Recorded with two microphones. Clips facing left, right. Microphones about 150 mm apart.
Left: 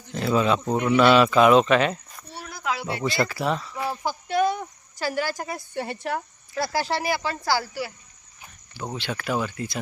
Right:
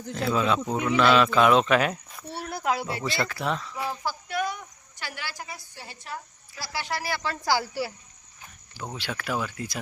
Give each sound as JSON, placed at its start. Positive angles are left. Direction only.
{"t": 0.1, "sound": "speech", "side_deg": 0}
{"t": 2.5, "sound": "a sound", "side_deg": -50}
{"t": 2.8, "sound": "speech", "side_deg": 0}
{"t": 3.8, "sound": "cricket", "side_deg": 20}
{"t": 6.7, "sound": "speech", "side_deg": 35}
{"t": 7.4, "sound": "speech", "side_deg": -15}
{"t": 7.7, "sound": "speech", "side_deg": -30}
{"t": 9.0, "sound": "speech", "side_deg": 0}